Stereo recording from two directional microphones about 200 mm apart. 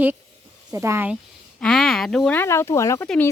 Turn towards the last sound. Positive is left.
turn(degrees=10)  # may be behind; listen again after turning